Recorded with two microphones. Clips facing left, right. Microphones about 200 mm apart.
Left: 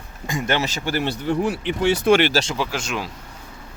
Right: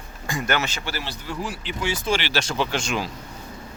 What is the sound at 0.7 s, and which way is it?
Speech, 50° left (ahead or behind).